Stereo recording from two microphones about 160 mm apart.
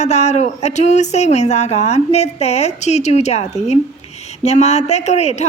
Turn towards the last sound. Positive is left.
turn(degrees=45)  # may be behind; listen again after turning